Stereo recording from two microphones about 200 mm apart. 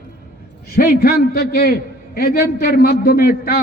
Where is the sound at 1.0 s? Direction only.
50° left (ahead or behind).